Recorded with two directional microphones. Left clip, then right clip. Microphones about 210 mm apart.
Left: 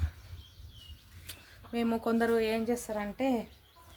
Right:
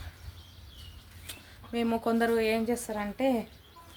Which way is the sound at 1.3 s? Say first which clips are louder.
Right 2 dB; centre (ahead or behind).